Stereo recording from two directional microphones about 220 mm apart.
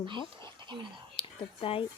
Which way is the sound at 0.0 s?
20° right (ahead or behind).